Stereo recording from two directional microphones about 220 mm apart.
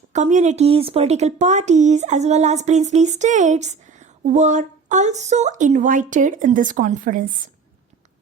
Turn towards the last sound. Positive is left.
turn(degrees=-40)  # may be behind; listen again after turning